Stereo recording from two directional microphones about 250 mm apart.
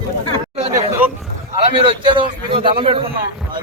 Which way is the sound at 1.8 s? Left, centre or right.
Centre.